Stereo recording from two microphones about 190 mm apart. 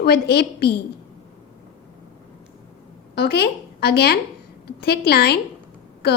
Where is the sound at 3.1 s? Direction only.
55° left (ahead or behind).